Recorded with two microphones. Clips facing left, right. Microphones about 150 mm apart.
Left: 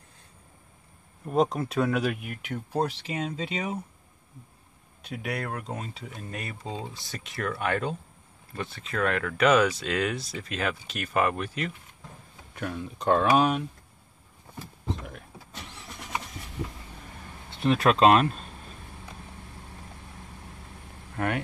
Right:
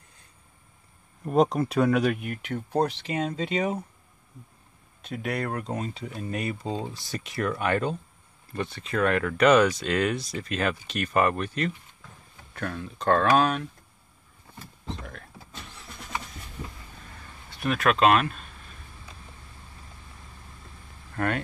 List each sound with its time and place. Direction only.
1.2 s speech: centre (ahead or behind)
5.0 s speech: 5° left (ahead or behind)
14.9 s speech: 10° left (ahead or behind)
17.5 s speech: 25° left (ahead or behind)
21.2 s speech: 15° left (ahead or behind)